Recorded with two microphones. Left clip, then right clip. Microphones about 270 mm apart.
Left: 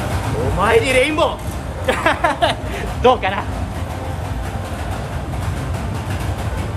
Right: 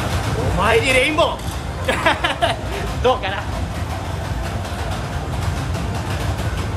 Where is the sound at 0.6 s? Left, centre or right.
Centre.